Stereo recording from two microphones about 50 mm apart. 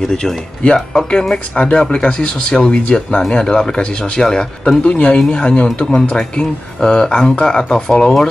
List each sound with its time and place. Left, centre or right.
0.1 s speech: centre
4.8 s a man's voice: left